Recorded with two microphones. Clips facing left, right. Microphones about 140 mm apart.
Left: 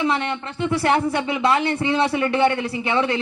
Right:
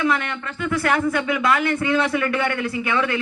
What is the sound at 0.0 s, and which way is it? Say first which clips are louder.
A man's voice: even; 25° left (ahead or behind).